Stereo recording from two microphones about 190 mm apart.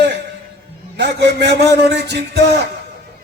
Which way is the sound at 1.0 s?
60° right (ahead or behind).